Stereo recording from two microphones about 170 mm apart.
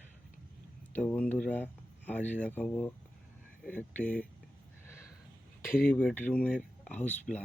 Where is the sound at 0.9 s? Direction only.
10° left (ahead or behind).